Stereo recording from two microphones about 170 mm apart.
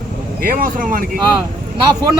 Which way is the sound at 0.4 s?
55° right (ahead or behind).